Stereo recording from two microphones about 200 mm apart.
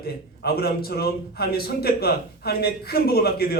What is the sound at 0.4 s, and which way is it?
A man's voice, 50° left (ahead or behind).